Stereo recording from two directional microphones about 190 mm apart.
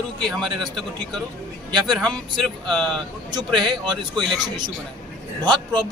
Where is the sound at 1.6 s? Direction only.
25° right (ahead or behind).